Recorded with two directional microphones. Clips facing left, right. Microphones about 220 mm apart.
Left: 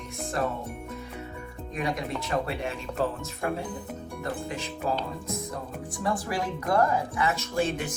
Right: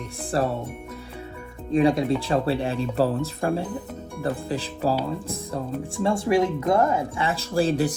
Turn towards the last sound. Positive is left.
turn(degrees=-35)  # may be behind; listen again after turning